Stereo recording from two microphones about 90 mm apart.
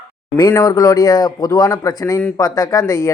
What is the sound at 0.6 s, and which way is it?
Speech, 45° left (ahead or behind).